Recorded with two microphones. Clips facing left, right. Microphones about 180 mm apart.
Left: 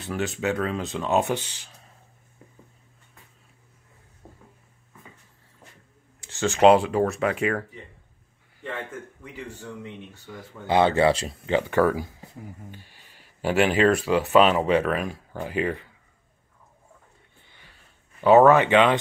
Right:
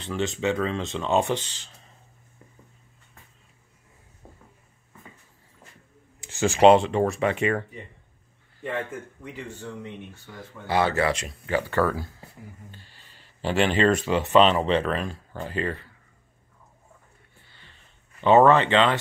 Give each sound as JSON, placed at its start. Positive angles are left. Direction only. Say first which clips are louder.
{"t": 0.0, "sound": "speech", "louder": "right 1 dB", "side_deg": 5}
{"t": 6.2, "sound": "a sound", "louder": "right 1 dB", "side_deg": -15}
{"t": 6.6, "sound": "speech", "louder": "even", "side_deg": 5}
{"t": 10.7, "sound": "speech", "louder": "left 4 dB", "side_deg": 20}
{"t": 17.4, "sound": "a sound", "louder": "even", "side_deg": 15}
{"t": 18.2, "sound": "speech", "louder": "left 2 dB", "side_deg": 5}